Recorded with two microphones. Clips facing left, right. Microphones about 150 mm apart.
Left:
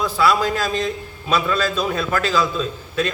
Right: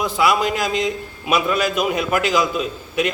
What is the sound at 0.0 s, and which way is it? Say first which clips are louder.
A man's voice: even; 20° right (ahead or behind).